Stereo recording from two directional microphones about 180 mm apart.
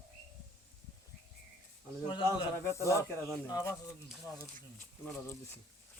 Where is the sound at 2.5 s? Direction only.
15° left (ahead or behind).